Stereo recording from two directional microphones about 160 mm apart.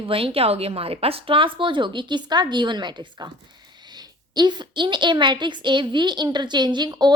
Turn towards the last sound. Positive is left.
turn(degrees=-25)  # may be behind; listen again after turning